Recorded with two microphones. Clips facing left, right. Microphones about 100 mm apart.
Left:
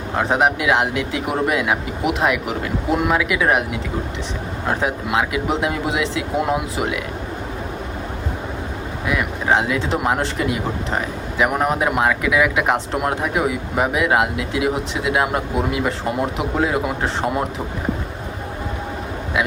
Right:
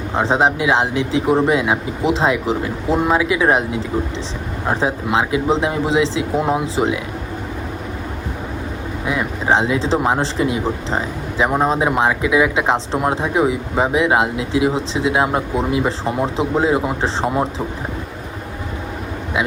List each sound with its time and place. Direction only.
0.2 s speech: 30° right (ahead or behind)
9.0 s speech: 25° right (ahead or behind)